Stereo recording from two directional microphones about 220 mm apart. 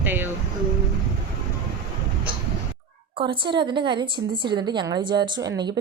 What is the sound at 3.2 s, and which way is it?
Speech, 20° right (ahead or behind).